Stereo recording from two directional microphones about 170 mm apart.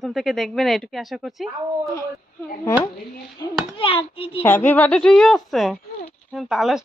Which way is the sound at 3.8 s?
30° left (ahead or behind).